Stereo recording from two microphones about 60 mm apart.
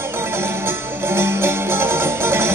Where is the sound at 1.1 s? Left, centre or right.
Right.